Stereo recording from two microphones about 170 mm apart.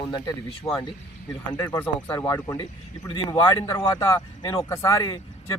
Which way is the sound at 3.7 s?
20° left (ahead or behind).